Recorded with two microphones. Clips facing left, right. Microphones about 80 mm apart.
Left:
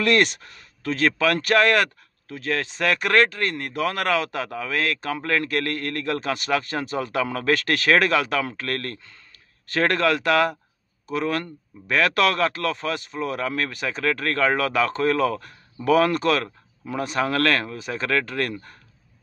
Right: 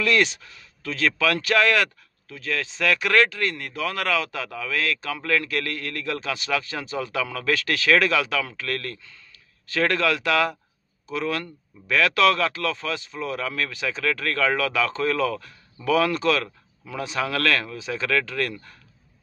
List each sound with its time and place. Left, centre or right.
0.0 s speech: left
14.0 s speech: left
17.7 s speech: left